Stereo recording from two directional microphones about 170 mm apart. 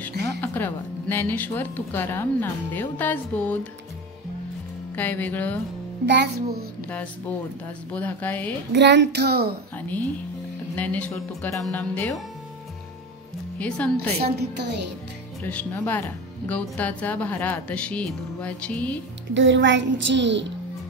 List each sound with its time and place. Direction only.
0.1 s music: 75° right (ahead or behind)
0.4 s speech: 10° left (ahead or behind)
4.9 s speech: 10° left (ahead or behind)
6.0 s a child's voice: 80° right
7.9 s speech: 10° left (ahead or behind)
8.7 s child singing: 90° right; by 9.5 s 70° right (ahead or behind)
9.8 s speech: 10° left (ahead or behind)
13.6 s a woman's voice: 5° left (ahead or behind)
14.2 s child singing: 80° right
15.4 s speech: 10° left (ahead or behind)
19.3 s a child's voice: 90° right